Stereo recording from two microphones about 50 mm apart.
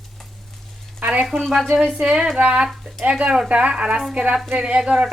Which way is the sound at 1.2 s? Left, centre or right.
Centre.